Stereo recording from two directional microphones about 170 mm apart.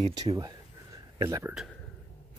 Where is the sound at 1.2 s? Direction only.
20° right (ahead or behind).